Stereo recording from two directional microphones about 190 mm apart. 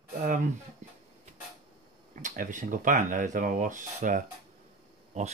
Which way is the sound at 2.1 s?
40° right (ahead or behind).